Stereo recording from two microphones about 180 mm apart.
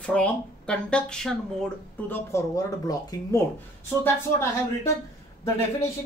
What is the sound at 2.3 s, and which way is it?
Speech, 15° left (ahead or behind).